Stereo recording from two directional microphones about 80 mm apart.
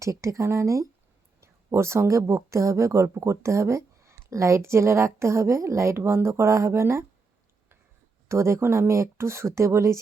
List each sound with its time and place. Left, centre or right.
0.0 s speech: right
8.3 s speech: right